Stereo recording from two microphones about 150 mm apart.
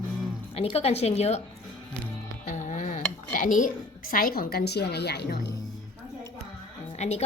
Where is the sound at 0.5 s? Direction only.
40° left (ahead or behind).